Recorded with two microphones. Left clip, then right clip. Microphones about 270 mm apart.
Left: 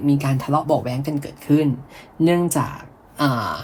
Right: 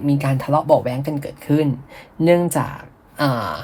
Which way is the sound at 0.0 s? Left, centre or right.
Right.